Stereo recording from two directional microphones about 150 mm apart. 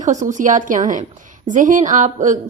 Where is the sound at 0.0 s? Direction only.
55° right (ahead or behind).